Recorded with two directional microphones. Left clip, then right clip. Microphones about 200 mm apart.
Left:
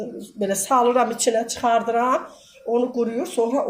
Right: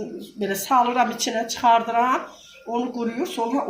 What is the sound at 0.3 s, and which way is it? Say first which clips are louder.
A woman's voice: even; 50° left (ahead or behind).